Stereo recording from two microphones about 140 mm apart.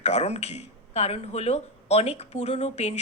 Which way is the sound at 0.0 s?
50° left (ahead or behind).